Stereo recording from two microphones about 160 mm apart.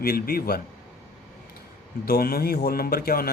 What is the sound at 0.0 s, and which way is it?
Speech, 70° left (ahead or behind).